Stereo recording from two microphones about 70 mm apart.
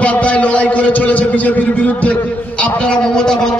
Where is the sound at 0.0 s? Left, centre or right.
Centre.